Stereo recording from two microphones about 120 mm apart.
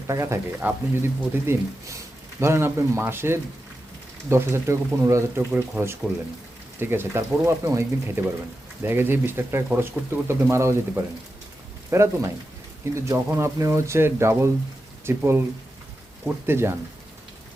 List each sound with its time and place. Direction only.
0.1 s speech: 25° right (ahead or behind)